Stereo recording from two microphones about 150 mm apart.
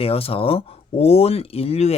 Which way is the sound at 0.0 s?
40° left (ahead or behind).